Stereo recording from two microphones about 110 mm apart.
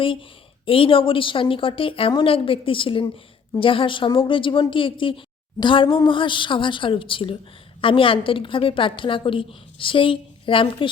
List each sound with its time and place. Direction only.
0.0 s a woman's voice: 50° left (ahead or behind)